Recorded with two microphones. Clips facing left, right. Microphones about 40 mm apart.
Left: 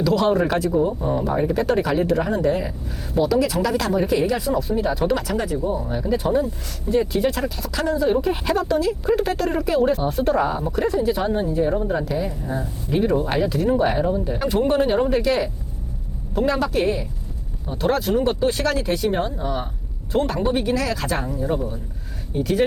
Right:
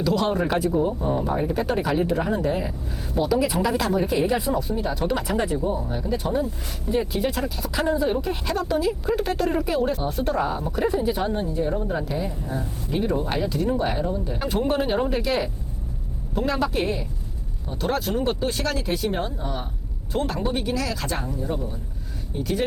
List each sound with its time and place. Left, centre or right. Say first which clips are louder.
0.0 s speech: left 4 dB; centre
3.8 s speech: left 2 dB; centre
4.3 s speech: left 1 dB; centre
4.8 s speech: left 4 dB; centre
5.8 s speech: left 4 dB; centre
7.7 s speech: even; centre
8.0 s speech: left 5 dB; centre
8.6 s speech: left 3 dB; centre
10.7 s speech: left 2 dB; centre
11.3 s speech: left 4 dB; centre
12.5 s speech: left 3 dB; centre
14.3 s speech: left 4 dB; centre
21.4 s speech: left 5 dB; left
22.4 s speech: left 5 dB; centre